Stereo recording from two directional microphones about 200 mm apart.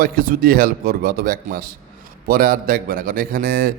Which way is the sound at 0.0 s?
45° right (ahead or behind).